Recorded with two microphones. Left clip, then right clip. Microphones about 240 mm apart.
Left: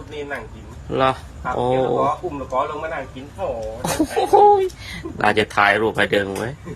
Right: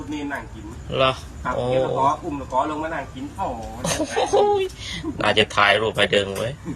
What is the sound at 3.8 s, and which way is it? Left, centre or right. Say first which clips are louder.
Speech: left 2 dB; left.